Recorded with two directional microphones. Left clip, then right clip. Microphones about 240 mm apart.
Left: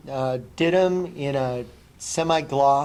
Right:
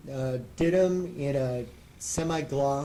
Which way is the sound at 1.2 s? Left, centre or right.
Left.